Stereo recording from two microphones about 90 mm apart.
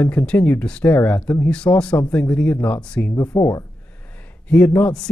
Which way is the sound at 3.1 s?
30° left (ahead or behind).